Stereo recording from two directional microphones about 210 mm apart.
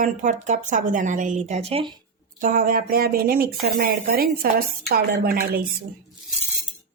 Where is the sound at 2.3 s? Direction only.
40° right (ahead or behind).